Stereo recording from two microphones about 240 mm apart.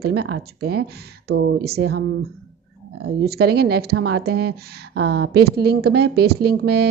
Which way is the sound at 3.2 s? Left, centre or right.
Right.